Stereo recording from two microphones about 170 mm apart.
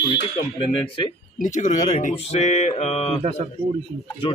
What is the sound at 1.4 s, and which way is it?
Speech, 50° left (ahead or behind).